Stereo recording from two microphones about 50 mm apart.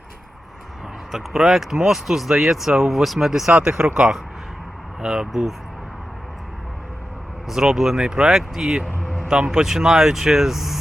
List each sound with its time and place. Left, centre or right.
1.1 s speech: centre
3.5 s speech: centre
7.4 s speech: centre
9.0 s a sound: centre
9.3 s speech: centre